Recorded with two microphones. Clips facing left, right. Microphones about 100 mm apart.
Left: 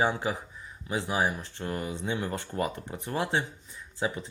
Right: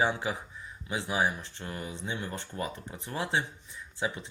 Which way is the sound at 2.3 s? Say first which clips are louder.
Left 5 dB; 70° left (ahead or behind).